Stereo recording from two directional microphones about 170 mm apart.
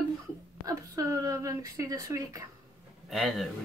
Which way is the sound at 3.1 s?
Centre (ahead or behind).